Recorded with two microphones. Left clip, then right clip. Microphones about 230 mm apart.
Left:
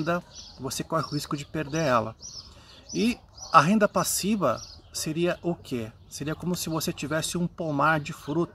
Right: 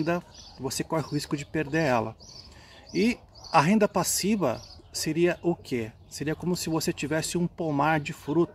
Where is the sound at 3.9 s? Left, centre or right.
Centre.